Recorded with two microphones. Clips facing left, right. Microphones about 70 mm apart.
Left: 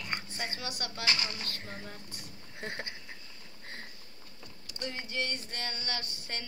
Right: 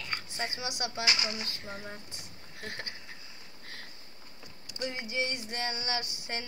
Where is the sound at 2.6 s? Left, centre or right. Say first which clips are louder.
Left 2 dB; left.